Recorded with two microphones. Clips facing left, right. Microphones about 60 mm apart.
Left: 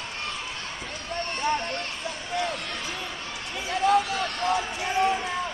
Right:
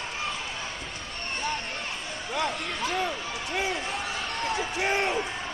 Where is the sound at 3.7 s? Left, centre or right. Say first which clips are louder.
Left 9 dB; left.